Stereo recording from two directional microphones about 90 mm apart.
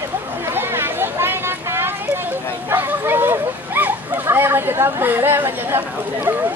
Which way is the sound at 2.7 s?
25° right (ahead or behind).